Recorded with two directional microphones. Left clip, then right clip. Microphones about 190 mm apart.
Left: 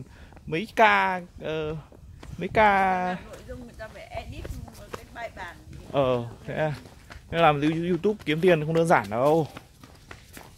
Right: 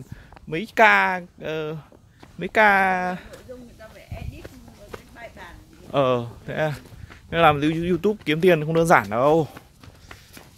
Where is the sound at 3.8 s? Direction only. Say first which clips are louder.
Left 4 dB; 20° left (ahead or behind).